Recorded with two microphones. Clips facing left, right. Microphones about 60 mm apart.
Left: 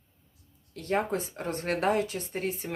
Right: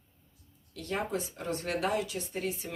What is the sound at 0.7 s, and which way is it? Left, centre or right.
Speech, left.